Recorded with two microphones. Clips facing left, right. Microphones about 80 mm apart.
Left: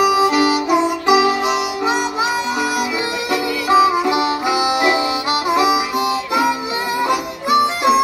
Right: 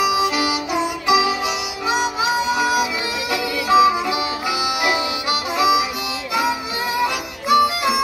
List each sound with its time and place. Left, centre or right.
0.0 s harmonica: left
3.6 s music: left
5.5 s harmonica: left
7.1 s harmonica: left